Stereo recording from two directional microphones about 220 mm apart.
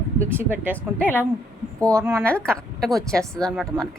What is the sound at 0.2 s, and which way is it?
Speech, 10° right (ahead or behind).